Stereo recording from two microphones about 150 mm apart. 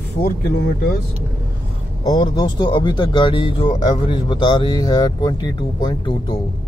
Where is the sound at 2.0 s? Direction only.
30° left (ahead or behind).